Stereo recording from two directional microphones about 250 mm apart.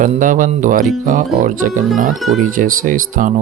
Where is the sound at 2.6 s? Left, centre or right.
Right.